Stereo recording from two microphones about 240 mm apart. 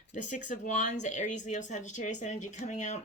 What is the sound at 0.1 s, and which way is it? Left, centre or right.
Speech, left.